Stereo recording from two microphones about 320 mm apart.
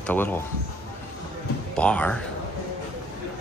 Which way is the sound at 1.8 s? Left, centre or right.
Centre.